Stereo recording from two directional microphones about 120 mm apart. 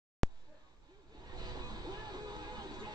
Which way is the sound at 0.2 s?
Centre (ahead or behind).